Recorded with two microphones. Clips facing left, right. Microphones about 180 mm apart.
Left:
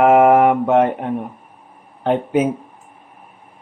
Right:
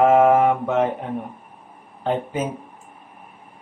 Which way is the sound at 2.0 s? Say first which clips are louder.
Left 7 dB; 65° left (ahead or behind).